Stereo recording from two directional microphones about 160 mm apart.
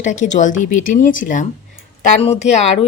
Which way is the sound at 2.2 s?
45° left (ahead or behind).